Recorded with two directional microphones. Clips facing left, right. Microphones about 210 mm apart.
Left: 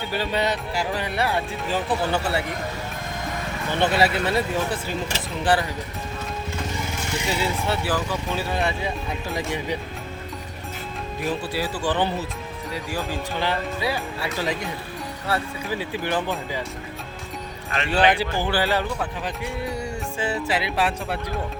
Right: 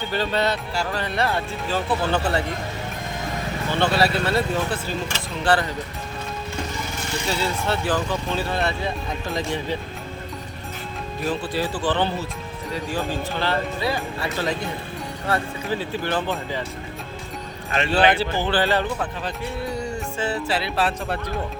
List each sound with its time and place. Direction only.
0.1 s speech: 10° left (ahead or behind)
3.8 s speech: 15° left (ahead or behind)
7.3 s speech: 15° left (ahead or behind)
11.2 s speech: 10° left (ahead or behind)
17.9 s speech: 15° left (ahead or behind)
20.1 s speech: 15° left (ahead or behind)